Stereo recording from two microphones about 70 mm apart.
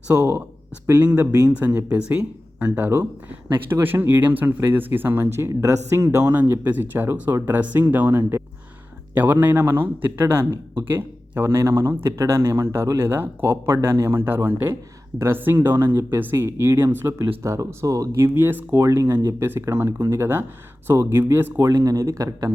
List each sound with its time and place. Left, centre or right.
0.1 s speech: right
0.9 s speech: right
6.3 s speech: right
18.3 s speech: right
21.7 s speech: right